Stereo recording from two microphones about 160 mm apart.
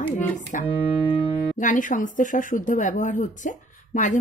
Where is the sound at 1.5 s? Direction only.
55° left (ahead or behind).